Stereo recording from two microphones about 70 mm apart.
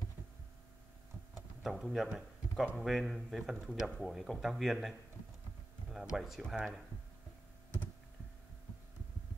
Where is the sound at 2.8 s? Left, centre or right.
Centre.